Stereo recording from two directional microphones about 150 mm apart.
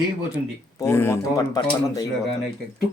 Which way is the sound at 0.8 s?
15° left (ahead or behind).